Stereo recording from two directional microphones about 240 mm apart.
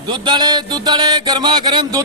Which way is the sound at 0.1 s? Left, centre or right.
Centre.